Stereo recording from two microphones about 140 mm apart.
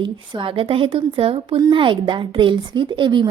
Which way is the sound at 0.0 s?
35° right (ahead or behind).